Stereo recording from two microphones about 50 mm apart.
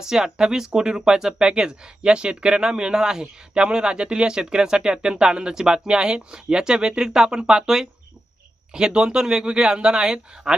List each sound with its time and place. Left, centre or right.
0.0 s speech: centre